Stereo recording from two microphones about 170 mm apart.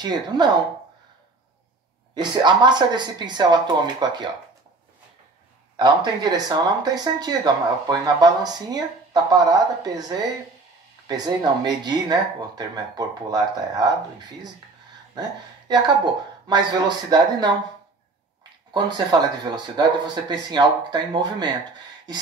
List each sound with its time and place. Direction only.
0.0 s speech: 25° right (ahead or behind)
2.1 s speech: 25° right (ahead or behind)
5.8 s speech: 25° right (ahead or behind)
15.7 s speech: 25° right (ahead or behind)
18.7 s speech: 25° right (ahead or behind)